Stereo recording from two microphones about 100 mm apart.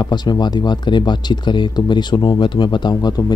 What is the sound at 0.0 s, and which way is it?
Speech, 45° left (ahead or behind).